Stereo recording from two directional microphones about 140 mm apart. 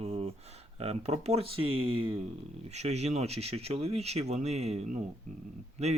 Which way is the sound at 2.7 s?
50° right (ahead or behind).